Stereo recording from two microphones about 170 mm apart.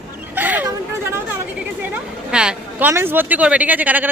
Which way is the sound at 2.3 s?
5° right (ahead or behind).